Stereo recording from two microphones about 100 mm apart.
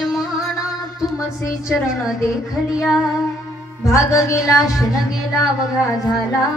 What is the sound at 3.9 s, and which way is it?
Music, 30° left (ahead or behind).